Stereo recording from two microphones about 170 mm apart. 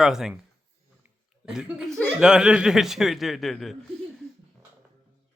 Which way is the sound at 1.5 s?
5° right (ahead or behind).